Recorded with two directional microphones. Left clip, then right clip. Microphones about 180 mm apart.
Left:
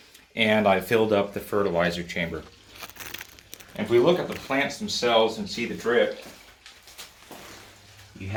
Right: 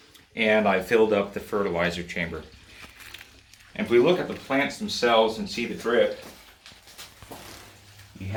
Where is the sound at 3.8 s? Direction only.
15° left (ahead or behind).